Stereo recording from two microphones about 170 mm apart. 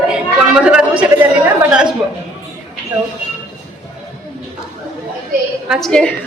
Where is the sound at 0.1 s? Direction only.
5° right (ahead or behind).